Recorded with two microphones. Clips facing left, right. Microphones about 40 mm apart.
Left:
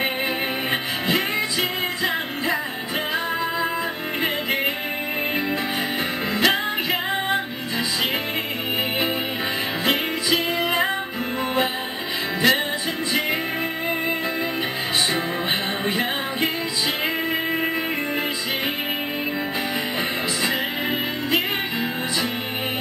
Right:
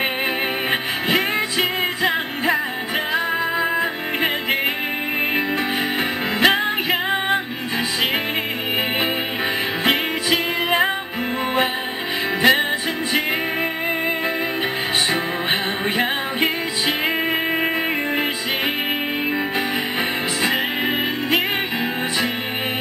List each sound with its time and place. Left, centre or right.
0.7 s music: right
6.4 s music: right
12.4 s music: centre